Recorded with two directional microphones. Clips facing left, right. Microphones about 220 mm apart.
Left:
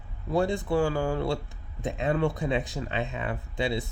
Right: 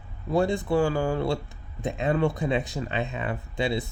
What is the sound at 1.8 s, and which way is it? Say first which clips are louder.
Speech: right 2 dB; 5° right (ahead or behind).